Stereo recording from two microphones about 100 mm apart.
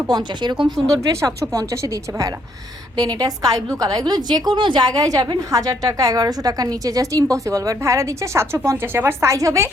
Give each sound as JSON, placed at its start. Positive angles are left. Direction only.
{"t": 0.1, "sound": "speech", "side_deg": -45}
{"t": 0.6, "sound": "a woman's voice", "side_deg": -35}
{"t": 4.9, "sound": "a woman's voice", "side_deg": -35}